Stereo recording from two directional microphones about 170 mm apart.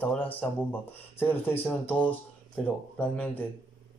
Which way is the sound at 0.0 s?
10° left (ahead or behind).